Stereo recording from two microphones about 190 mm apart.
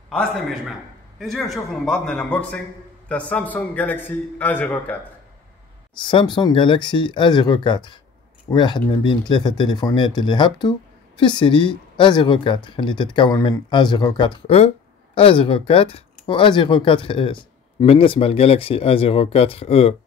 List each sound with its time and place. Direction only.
0.1 s a man's voice: centre (ahead or behind)
5.9 s speech: 25° left (ahead or behind)